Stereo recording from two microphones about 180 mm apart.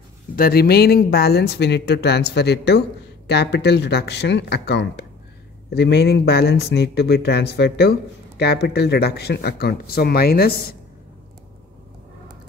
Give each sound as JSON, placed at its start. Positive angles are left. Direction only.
{"t": 0.4, "sound": "speech", "side_deg": 55}